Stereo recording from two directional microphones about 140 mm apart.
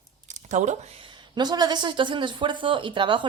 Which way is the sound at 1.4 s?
30° right (ahead or behind).